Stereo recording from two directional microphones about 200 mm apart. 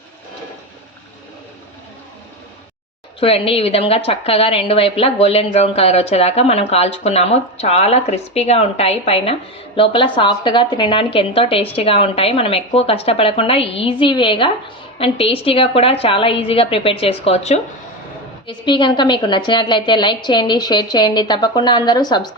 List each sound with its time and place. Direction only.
3.2 s a woman's voice: 30° left (ahead or behind)